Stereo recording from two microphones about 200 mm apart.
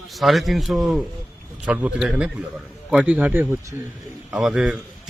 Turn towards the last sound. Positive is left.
turn(degrees=0)  # may be behind; listen again after turning